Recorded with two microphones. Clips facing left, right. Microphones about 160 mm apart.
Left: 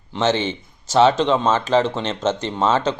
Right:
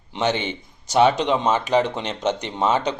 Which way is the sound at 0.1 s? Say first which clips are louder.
Left 3 dB; 15° right (ahead or behind).